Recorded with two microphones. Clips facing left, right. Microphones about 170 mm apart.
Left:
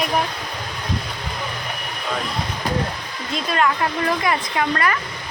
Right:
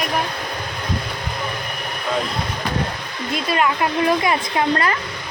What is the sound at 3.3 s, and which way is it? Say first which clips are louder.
Speech: right 1 dB; 5° right (ahead or behind).